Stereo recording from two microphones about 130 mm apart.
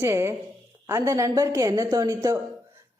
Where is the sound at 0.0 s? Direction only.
20° right (ahead or behind).